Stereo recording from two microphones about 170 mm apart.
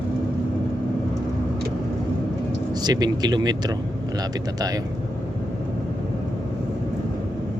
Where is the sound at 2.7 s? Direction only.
25° right (ahead or behind).